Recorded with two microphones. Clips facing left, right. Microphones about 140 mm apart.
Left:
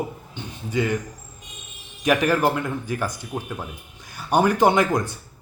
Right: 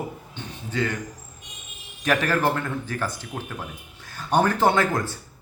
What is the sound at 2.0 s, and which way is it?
A man's voice, 15° left (ahead or behind).